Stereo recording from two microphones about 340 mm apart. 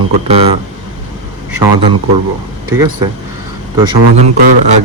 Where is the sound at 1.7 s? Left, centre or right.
Right.